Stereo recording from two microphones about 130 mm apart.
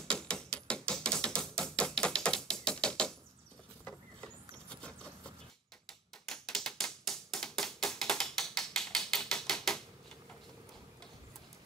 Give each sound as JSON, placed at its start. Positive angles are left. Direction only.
{"t": 0.1, "sound": "music", "side_deg": 5}
{"t": 3.8, "sound": "a sound", "side_deg": 10}
{"t": 6.2, "sound": "typewriter", "side_deg": 5}